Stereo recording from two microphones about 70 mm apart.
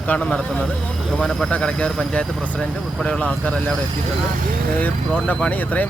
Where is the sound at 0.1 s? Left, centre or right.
Centre.